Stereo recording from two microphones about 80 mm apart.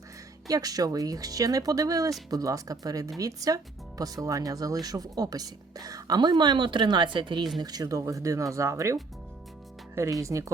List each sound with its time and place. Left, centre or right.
0.4 s speech: right
7.6 s speech: right